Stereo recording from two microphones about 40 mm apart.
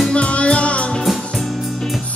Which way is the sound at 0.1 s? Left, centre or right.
Left.